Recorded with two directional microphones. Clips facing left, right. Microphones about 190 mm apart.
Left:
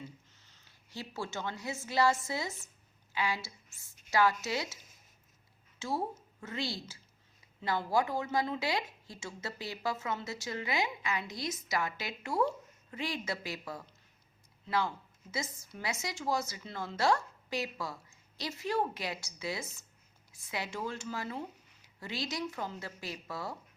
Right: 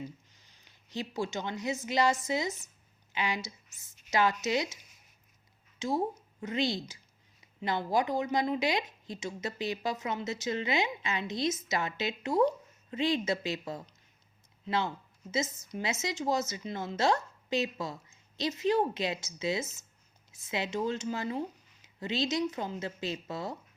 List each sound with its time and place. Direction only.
0.3 s a woman's voice: 15° right (ahead or behind)
5.8 s a woman's voice: 15° right (ahead or behind)